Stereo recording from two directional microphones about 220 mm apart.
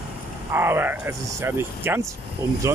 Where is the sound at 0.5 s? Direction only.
10° right (ahead or behind).